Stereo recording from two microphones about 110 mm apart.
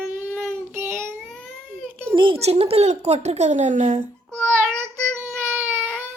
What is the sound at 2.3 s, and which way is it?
Speech, 70° right (ahead or behind).